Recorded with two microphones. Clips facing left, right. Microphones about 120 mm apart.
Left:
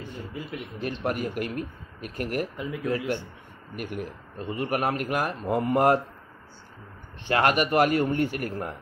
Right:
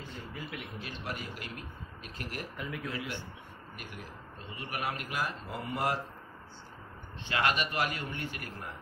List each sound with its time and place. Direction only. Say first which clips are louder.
0.5 s speech: left 9 dB; 55° left (ahead or behind)
2.5 s speech: left 6 dB; 25° left (ahead or behind)
3.7 s speech: left 13 dB; 55° left (ahead or behind)
7.2 s speech: left 8 dB; 50° left (ahead or behind)